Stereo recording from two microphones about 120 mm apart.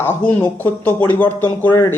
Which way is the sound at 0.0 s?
20° left (ahead or behind).